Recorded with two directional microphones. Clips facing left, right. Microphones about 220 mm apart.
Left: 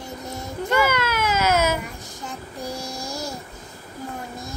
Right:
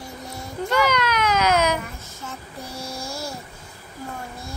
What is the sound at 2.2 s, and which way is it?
Child singing, 15° left (ahead or behind).